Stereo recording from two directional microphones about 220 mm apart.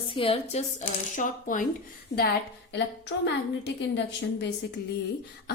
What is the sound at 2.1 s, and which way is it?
A woman's voice, 55° left (ahead or behind).